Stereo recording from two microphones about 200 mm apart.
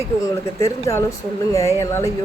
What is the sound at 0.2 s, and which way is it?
Speech, 15° left (ahead or behind).